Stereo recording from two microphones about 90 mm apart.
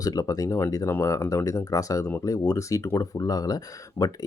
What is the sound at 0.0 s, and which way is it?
Speech, 40° left (ahead or behind).